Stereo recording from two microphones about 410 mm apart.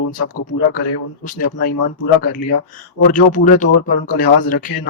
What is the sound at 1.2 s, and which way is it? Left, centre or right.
A man's voice, centre.